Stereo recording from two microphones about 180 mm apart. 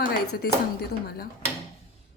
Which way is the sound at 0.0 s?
60° left (ahead or behind).